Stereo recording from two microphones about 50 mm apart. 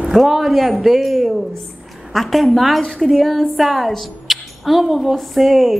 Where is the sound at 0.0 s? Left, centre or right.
Centre.